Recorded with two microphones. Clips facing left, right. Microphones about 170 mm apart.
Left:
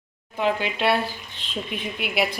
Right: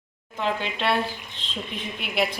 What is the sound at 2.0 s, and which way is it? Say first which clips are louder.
Speech: left 1 dB; 5° left (ahead or behind).